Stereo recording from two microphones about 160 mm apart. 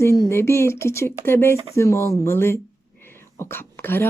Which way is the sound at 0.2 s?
15° left (ahead or behind).